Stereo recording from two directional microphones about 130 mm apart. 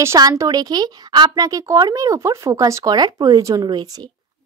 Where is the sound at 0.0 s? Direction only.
25° right (ahead or behind).